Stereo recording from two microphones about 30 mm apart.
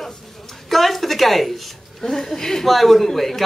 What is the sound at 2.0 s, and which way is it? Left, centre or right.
Speech, centre.